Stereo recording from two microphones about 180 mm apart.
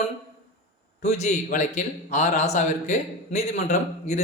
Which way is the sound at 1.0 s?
40° left (ahead or behind).